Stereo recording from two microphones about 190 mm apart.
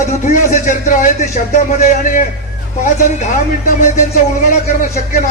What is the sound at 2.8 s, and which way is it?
Speech, 40° left (ahead or behind).